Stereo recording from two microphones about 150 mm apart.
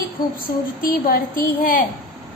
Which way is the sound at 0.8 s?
75° left (ahead or behind).